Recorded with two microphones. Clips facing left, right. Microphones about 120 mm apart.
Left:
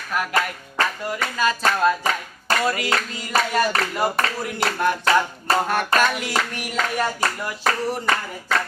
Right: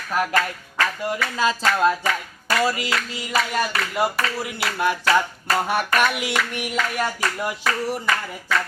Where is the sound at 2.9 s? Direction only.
40° left (ahead or behind).